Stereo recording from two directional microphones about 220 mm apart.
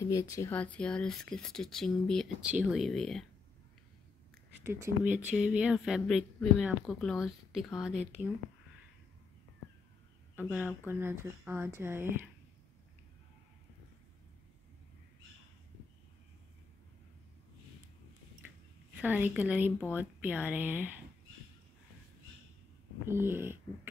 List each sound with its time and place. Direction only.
0.0 s speech: 15° left (ahead or behind)
4.6 s speech: 10° right (ahead or behind)
10.9 s speech: 10° right (ahead or behind)
18.9 s speech: 5° right (ahead or behind)
23.0 s speech: 10° right (ahead or behind)